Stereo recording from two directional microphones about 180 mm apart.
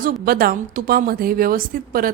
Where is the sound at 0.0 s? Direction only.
55° right (ahead or behind).